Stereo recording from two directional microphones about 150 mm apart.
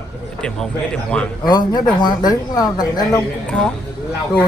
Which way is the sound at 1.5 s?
30° left (ahead or behind).